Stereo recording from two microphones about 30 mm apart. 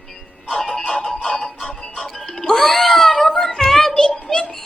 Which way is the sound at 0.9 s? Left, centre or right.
Left.